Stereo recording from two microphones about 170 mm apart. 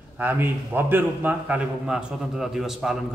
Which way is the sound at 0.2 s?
10° right (ahead or behind).